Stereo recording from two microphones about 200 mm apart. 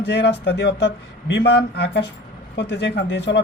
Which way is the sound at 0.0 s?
60° left (ahead or behind).